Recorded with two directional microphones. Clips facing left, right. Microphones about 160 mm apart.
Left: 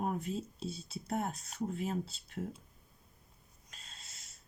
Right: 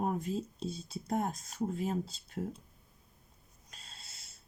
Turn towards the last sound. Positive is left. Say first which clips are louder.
# right 1 dB
turn(degrees=-30)  # may be behind; listen again after turning